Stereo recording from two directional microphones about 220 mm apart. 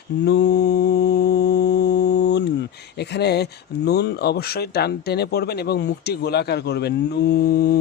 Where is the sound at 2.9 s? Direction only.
50° left (ahead or behind).